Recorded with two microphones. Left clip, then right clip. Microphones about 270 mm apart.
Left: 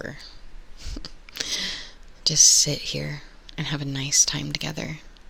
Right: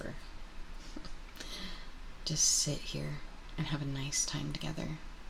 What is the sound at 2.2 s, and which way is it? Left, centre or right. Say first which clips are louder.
Speech: left 14 dB; left.